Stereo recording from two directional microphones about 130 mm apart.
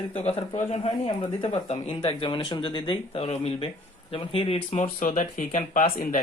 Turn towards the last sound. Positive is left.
turn(degrees=90)